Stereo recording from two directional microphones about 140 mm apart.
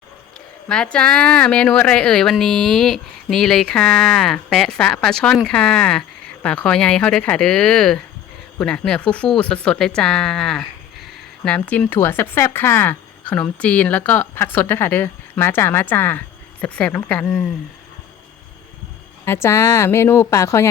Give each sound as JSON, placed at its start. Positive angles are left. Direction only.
{"t": 0.7, "sound": "speech", "side_deg": 5}
{"t": 19.2, "sound": "speech", "side_deg": 20}